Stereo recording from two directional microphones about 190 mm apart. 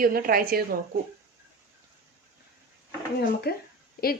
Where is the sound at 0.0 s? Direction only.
50° right (ahead or behind).